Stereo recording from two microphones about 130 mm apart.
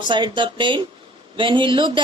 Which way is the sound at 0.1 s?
40° right (ahead or behind).